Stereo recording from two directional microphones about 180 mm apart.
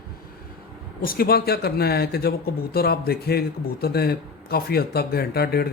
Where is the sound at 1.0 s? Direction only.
55° left (ahead or behind).